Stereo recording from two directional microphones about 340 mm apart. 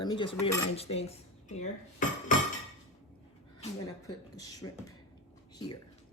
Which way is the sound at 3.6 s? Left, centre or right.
Centre.